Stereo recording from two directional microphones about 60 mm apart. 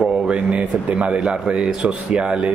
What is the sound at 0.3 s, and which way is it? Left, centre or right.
A man's voice, right.